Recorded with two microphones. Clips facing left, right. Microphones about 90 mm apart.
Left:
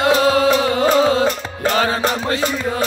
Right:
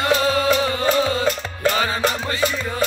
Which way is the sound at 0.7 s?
70° left (ahead or behind).